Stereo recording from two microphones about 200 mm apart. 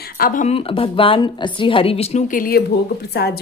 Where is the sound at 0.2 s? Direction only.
40° left (ahead or behind).